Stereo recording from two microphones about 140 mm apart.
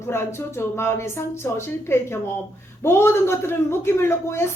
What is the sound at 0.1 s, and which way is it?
A man's voice, 15° left (ahead or behind).